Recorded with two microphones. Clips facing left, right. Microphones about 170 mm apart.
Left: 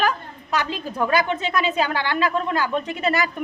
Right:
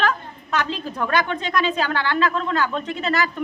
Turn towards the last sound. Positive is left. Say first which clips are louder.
# left 1 dB
turn(degrees=10)  # may be behind; listen again after turning